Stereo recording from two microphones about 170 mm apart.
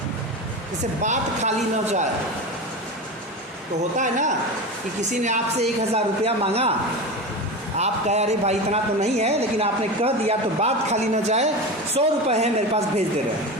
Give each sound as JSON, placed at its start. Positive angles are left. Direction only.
{"t": 1.0, "sound": "a woman's voice", "side_deg": -45}
{"t": 3.9, "sound": "a woman's voice", "side_deg": -45}
{"t": 7.8, "sound": "speech", "side_deg": -40}